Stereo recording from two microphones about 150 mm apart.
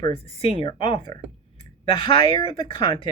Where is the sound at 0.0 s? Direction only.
40° left (ahead or behind).